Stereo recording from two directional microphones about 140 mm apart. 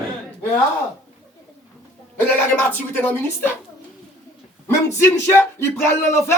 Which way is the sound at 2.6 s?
15° left (ahead or behind).